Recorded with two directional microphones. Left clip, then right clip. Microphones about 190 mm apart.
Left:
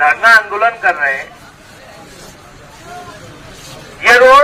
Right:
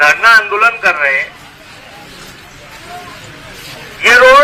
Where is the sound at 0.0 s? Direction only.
50° left (ahead or behind).